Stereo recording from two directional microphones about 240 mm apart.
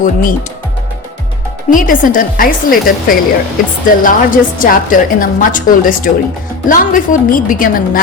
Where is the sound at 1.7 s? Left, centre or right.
Left.